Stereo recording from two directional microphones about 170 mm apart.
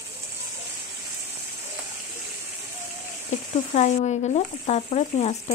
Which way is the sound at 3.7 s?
40° left (ahead or behind).